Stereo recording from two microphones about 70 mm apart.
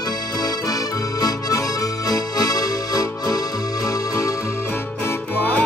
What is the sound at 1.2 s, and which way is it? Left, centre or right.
Accordion, left.